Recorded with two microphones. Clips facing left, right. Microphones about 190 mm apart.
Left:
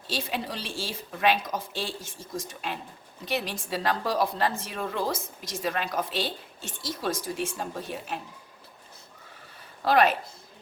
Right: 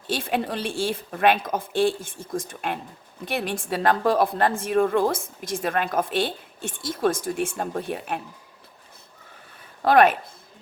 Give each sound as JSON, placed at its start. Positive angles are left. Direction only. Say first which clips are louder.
{"t": 0.1, "sound": "a woman's voice", "louder": "right 6 dB", "side_deg": -55}
{"t": 9.8, "sound": "a woman's voice", "louder": "right 5 dB", "side_deg": -55}